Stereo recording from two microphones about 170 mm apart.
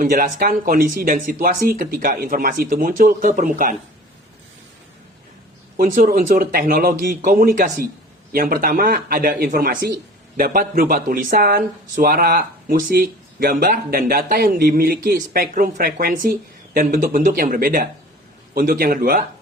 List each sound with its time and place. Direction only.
0.0 s speech: 55° right (ahead or behind)
5.7 s speech: 55° right (ahead or behind)